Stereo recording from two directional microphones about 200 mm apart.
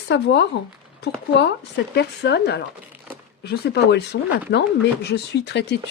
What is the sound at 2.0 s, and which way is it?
Speech, 55° left (ahead or behind).